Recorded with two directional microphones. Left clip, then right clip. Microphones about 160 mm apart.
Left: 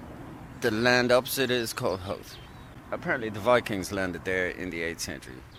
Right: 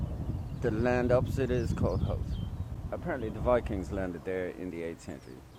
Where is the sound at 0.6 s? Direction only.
25° left (ahead or behind).